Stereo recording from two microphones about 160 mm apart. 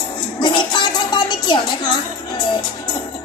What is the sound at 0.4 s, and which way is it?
Music, 30° left (ahead or behind).